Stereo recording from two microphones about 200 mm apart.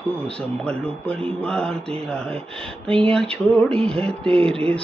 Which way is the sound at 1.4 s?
5° left (ahead or behind).